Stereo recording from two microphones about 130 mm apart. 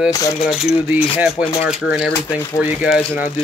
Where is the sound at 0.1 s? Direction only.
25° left (ahead or behind).